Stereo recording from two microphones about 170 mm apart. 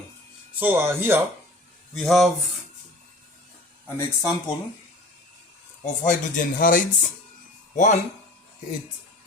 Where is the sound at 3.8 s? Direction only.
15° left (ahead or behind).